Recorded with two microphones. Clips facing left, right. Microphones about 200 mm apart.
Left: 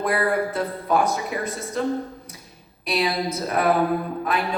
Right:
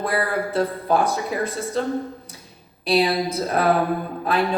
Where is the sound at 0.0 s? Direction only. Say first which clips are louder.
Left 1 dB; 30° right (ahead or behind).